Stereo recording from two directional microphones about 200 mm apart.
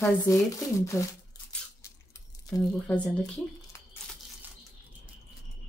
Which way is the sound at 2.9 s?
5° left (ahead or behind).